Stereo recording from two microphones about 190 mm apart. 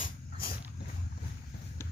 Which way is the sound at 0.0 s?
50° left (ahead or behind).